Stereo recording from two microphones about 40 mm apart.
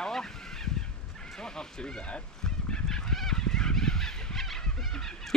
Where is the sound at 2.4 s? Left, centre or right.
Centre.